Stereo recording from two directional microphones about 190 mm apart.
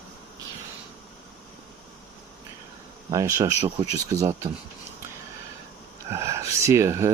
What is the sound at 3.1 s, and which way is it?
Speech, 15° right (ahead or behind).